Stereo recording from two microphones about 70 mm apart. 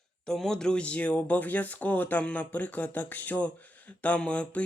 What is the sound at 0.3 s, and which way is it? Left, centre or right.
Speech, centre.